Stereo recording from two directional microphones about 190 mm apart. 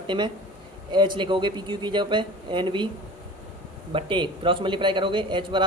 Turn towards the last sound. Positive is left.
turn(degrees=-25)  # may be behind; listen again after turning